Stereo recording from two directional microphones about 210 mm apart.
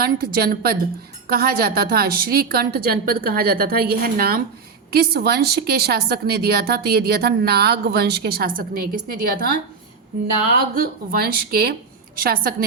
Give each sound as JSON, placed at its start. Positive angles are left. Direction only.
{"t": 0.0, "sound": "a woman's voice", "side_deg": -45}
{"t": 10.8, "sound": "a woman's voice", "side_deg": -45}